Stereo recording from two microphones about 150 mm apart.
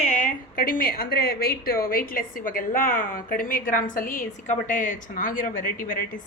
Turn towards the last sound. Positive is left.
turn(degrees=65)  # may be behind; listen again after turning